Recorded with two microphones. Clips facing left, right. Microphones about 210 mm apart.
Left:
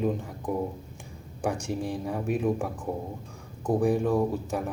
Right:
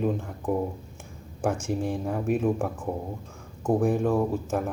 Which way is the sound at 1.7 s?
Centre (ahead or behind).